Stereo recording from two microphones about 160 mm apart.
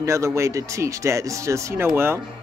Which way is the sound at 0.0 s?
20° right (ahead or behind).